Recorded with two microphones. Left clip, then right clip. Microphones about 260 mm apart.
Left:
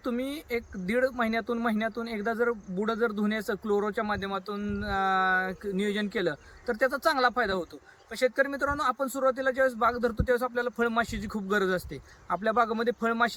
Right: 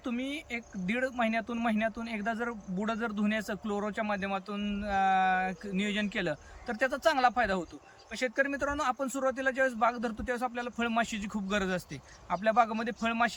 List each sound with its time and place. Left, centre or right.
0.2 s speech: left
0.5 s speech: centre